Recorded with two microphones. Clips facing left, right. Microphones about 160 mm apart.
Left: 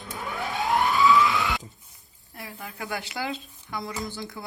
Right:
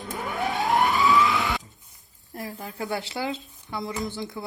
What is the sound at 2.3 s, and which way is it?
Speech, 40° right (ahead or behind).